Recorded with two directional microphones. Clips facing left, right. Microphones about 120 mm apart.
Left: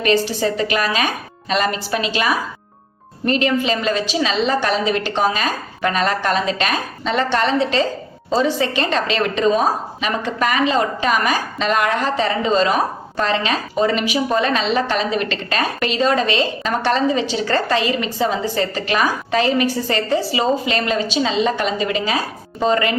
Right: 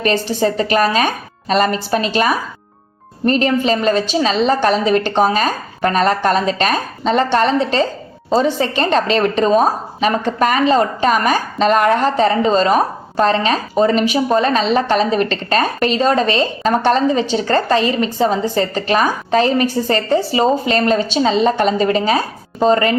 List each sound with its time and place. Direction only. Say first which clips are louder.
0.4 s a woman's voice: right 4 dB; 40° right (ahead or behind)
3.2 s a woman's voice: right 3 dB; 40° right (ahead or behind)